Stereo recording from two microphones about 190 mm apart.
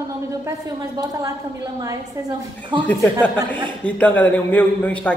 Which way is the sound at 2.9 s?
10° left (ahead or behind).